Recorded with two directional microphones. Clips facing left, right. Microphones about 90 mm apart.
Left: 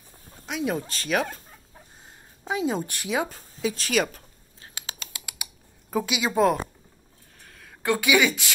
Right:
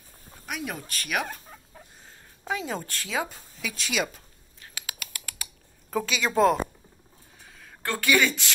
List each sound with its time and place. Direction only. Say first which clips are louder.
0.5 s speech: left 6 dB; 25° left (ahead or behind)
2.4 s speech: left 5 dB; 20° left (ahead or behind)
3.3 s a woman's voice: left 8 dB; 35° left (ahead or behind)
4.6 s typing: even; 30° left (ahead or behind)
5.2 s computer keyboard: even; 15° left (ahead or behind)
6.3 s speech: even; centre (ahead or behind)
7.3 s a sound: left 1 dB; 5° right (ahead or behind)
7.8 s speech: left 2 dB; 10° left (ahead or behind)